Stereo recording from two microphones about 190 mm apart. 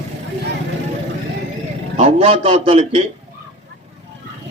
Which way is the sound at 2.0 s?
35° right (ahead or behind).